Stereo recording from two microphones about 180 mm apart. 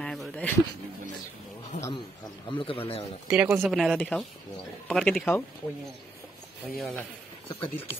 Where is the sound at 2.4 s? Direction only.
30° left (ahead or behind).